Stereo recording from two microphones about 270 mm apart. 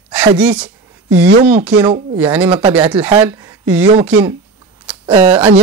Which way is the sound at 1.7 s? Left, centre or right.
Centre.